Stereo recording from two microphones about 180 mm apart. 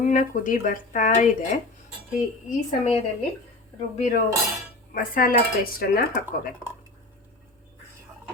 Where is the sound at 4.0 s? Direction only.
40° left (ahead or behind).